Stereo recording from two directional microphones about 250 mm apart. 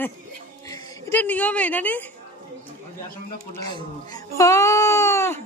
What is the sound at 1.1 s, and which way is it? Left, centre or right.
Speech, centre.